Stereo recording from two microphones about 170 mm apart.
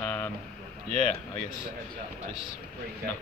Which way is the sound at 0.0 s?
10° left (ahead or behind).